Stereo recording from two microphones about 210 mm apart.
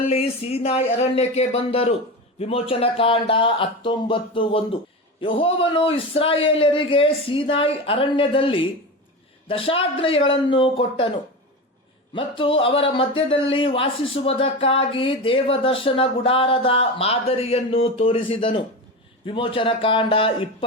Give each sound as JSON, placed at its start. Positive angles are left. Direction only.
{"t": 0.1, "sound": "speech", "side_deg": 30}
{"t": 12.1, "sound": "speech", "side_deg": 25}